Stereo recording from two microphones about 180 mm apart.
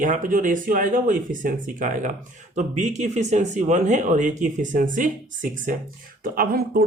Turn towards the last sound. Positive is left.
turn(degrees=-55)  # may be behind; listen again after turning